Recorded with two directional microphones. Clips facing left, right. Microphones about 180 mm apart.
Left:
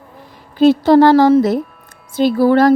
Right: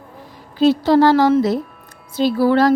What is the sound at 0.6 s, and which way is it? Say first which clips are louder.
A woman's voice: left 4 dB; 50° left (ahead or behind).